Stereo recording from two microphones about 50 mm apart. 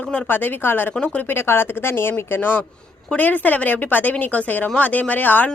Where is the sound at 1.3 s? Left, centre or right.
Left.